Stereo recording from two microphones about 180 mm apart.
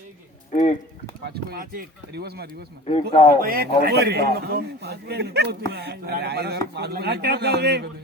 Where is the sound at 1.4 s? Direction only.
55° right (ahead or behind).